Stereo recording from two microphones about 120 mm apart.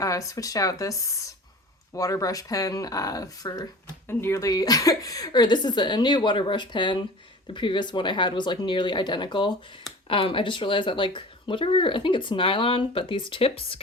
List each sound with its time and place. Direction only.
0.0 s a woman's voice: 25° left (ahead or behind); by 13.8 s 50° left (ahead or behind)